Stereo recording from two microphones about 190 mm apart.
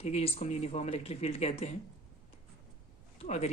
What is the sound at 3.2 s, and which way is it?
Speech, 35° left (ahead or behind).